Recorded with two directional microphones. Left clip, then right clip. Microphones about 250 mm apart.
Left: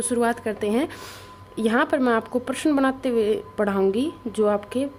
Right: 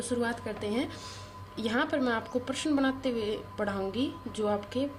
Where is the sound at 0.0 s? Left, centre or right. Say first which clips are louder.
Left 9 dB; left.